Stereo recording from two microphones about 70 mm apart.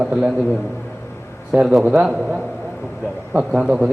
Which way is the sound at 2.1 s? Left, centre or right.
Right.